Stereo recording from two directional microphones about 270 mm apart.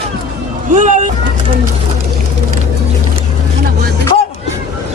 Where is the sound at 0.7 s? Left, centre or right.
Right.